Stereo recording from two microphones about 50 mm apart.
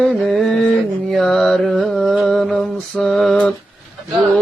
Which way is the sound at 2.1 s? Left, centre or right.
Centre.